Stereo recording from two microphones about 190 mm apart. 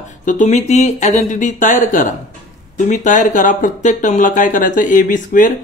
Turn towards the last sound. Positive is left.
turn(degrees=45)  # may be behind; listen again after turning